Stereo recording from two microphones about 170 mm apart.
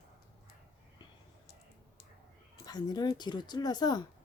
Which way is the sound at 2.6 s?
25° left (ahead or behind).